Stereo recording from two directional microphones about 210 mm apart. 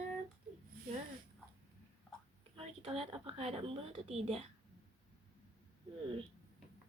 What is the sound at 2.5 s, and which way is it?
A woman's voice, 25° right (ahead or behind).